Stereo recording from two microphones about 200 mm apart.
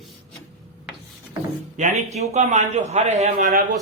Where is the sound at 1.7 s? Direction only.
35° right (ahead or behind).